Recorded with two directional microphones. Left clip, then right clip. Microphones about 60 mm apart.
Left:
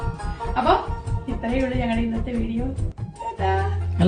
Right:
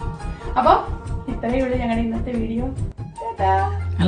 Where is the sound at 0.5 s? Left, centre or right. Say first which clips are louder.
Right 4 dB; right.